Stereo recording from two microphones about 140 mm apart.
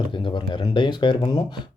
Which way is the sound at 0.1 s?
35° left (ahead or behind).